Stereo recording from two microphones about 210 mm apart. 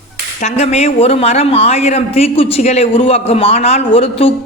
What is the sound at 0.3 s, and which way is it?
A man's voice, 30° left (ahead or behind).